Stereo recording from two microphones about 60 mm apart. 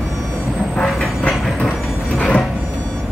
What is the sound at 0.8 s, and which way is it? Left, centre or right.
Train, centre.